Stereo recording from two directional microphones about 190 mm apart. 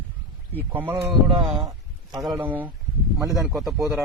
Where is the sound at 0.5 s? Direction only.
10° right (ahead or behind).